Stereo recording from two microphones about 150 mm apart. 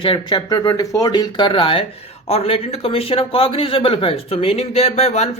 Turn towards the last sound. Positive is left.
turn(degrees=45)  # may be behind; listen again after turning